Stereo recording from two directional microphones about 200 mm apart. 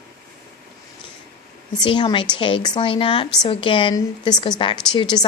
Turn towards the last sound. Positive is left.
turn(degrees=20)  # may be behind; listen again after turning